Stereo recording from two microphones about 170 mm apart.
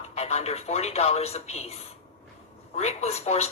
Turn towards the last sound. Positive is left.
turn(degrees=40)  # may be behind; listen again after turning